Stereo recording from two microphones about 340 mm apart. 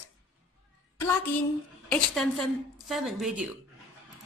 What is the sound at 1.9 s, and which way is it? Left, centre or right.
A woman's voice, centre.